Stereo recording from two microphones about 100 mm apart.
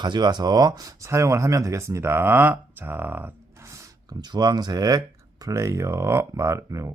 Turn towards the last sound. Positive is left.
turn(degrees=-30)  # may be behind; listen again after turning